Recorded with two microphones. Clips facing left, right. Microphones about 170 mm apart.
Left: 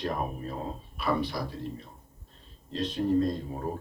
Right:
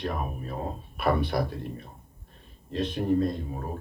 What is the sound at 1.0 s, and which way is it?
Speech, 60° right (ahead or behind).